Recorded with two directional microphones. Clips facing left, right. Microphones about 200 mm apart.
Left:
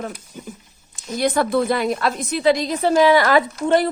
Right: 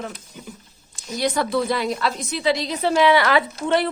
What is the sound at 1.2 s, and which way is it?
A woman's voice, 55° left (ahead or behind).